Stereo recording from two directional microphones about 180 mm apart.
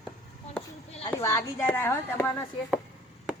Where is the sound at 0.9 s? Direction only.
35° left (ahead or behind).